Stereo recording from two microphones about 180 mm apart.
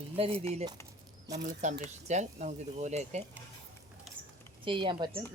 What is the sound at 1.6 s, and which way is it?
Speech, 40° right (ahead or behind).